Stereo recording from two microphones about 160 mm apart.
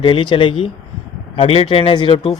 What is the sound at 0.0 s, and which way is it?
Speech, 35° left (ahead or behind).